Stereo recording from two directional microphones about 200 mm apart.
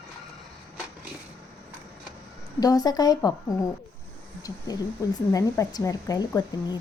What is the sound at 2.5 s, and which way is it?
Speech, 20° left (ahead or behind).